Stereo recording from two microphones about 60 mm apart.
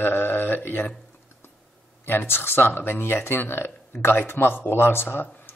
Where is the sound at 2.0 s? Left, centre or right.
Left.